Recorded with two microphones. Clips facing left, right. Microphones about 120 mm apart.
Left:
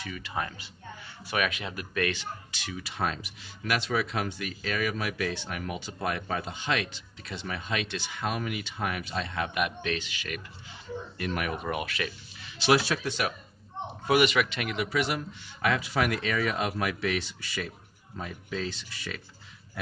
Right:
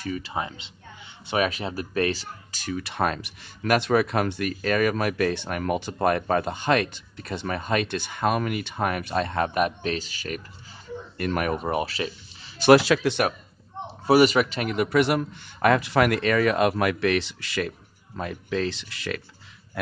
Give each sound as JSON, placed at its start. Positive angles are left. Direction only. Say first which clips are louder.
{"t": 0.0, "sound": "speech", "louder": "right 5 dB", "side_deg": -35}
{"t": 2.8, "sound": "speech", "louder": "right 5 dB", "side_deg": -60}
{"t": 11.1, "sound": "speech", "louder": "right 7 dB", "side_deg": -45}
{"t": 12.7, "sound": "speech", "louder": "right 8 dB", "side_deg": -90}
{"t": 13.8, "sound": "a man's voice", "louder": "right 6 dB", "side_deg": -35}
{"t": 14.9, "sound": "a man's voice", "louder": "right 8 dB", "side_deg": -60}